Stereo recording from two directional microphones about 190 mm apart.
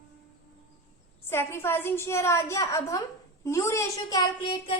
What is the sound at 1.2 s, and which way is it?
A woman's voice, 10° left (ahead or behind).